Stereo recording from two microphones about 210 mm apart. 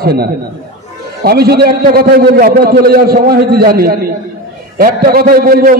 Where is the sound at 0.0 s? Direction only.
50° right (ahead or behind).